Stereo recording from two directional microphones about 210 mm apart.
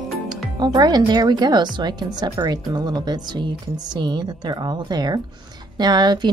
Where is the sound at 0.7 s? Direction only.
20° right (ahead or behind).